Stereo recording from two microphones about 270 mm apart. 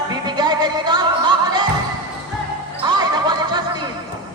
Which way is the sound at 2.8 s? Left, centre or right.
Centre.